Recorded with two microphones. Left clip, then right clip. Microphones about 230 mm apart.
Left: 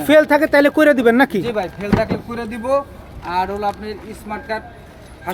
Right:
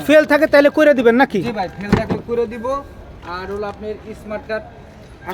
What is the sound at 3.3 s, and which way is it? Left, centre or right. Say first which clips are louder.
Speech: left 8 dB; left.